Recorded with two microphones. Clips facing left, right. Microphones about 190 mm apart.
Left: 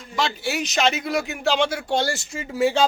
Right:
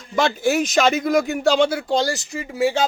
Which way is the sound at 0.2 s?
50° right (ahead or behind).